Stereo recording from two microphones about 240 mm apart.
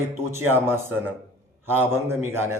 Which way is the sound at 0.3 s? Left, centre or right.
Centre.